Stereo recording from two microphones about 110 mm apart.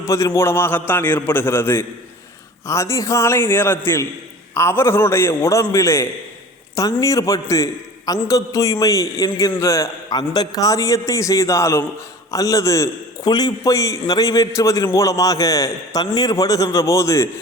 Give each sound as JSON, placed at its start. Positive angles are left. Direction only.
{"t": 0.0, "sound": "a man's voice", "side_deg": 25}